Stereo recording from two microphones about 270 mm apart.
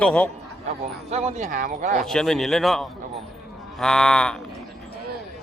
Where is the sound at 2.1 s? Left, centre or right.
Centre.